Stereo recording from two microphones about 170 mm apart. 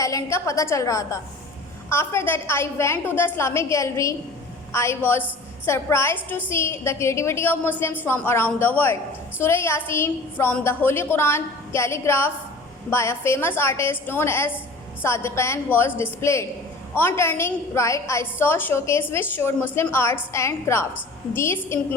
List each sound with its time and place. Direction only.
0.0 s a woman's voice: 20° left (ahead or behind)